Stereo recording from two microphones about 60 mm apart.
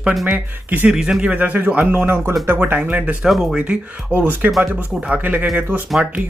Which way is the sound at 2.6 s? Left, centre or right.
Right.